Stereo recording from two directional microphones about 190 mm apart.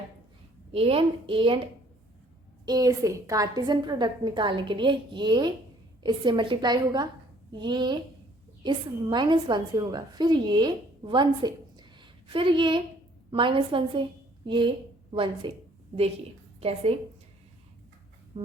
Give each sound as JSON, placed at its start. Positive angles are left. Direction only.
{"t": 0.7, "sound": "a woman's voice", "side_deg": -30}
{"t": 2.6, "sound": "a woman's voice", "side_deg": -20}
{"t": 16.6, "sound": "a woman's voice", "side_deg": -30}
{"t": 18.3, "sound": "music", "side_deg": -30}